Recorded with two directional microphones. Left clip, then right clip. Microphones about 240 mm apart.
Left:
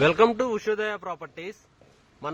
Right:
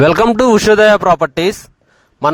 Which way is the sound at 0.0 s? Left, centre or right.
Right.